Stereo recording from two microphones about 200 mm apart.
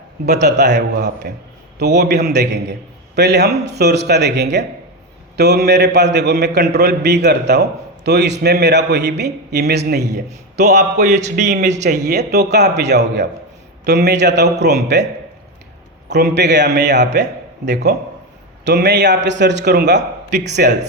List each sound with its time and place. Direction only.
0.3 s a man's voice: 35° right (ahead or behind)
0.5 s a man's voice: 55° right (ahead or behind)
10.6 s a man's voice: 35° right (ahead or behind)
11.9 s a man's voice: 50° right (ahead or behind)
16.0 s a man's voice: 55° right (ahead or behind)
18.6 s a man's voice: 60° right (ahead or behind)